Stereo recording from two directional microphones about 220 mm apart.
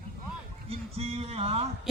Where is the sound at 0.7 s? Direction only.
25° right (ahead or behind).